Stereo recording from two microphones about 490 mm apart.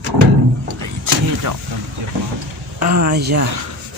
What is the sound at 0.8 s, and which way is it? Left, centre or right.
Vehicle, right.